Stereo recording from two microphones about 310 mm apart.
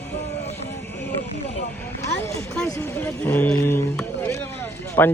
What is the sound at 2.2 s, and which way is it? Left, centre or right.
Speech, centre.